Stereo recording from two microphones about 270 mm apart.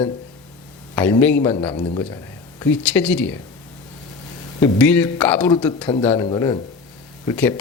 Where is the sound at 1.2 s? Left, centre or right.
Centre.